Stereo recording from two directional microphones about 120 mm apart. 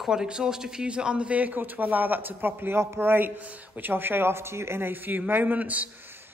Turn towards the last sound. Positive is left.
turn(degrees=-15)  # may be behind; listen again after turning